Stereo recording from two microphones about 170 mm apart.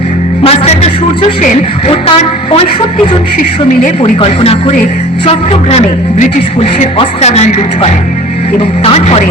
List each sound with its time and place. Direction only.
0.4 s music: 40° left (ahead or behind)
1.9 s a man's voice: 35° left (ahead or behind)
4.2 s a man's voice: 30° left (ahead or behind)